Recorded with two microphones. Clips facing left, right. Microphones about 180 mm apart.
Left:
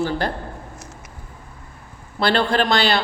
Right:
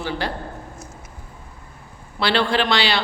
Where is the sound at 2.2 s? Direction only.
45° left (ahead or behind).